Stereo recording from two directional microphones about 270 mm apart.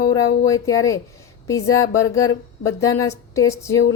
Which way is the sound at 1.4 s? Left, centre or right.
Centre.